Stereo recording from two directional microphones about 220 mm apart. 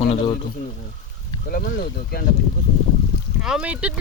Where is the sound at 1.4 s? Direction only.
40° left (ahead or behind).